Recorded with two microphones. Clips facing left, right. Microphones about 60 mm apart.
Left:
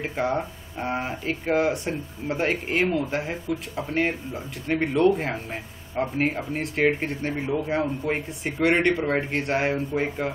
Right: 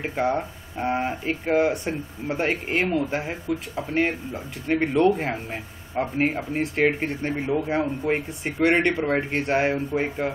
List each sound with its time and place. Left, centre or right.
0.0 s speech: centre